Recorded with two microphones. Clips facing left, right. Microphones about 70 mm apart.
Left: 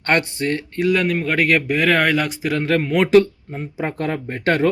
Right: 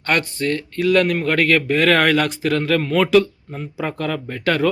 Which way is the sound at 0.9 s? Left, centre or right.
Centre.